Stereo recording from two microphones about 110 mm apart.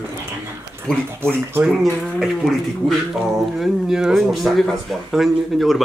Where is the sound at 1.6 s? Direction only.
5° right (ahead or behind).